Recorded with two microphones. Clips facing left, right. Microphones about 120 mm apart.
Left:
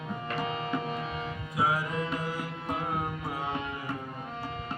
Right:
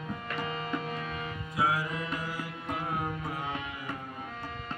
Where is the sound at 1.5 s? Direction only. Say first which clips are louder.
Left 1 dB; 15° left (ahead or behind).